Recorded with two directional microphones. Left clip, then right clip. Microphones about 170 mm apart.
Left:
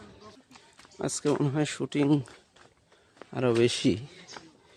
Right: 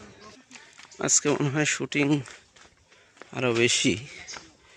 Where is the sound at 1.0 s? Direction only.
5° left (ahead or behind).